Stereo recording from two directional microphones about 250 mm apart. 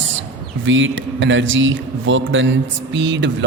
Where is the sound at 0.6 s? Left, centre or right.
Right.